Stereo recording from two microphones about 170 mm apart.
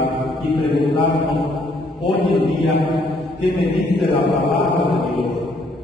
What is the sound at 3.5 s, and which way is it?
Chant, 30° left (ahead or behind).